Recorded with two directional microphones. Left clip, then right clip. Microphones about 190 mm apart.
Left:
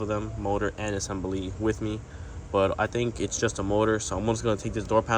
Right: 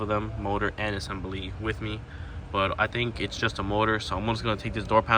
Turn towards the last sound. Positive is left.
turn(degrees=15)  # may be behind; listen again after turning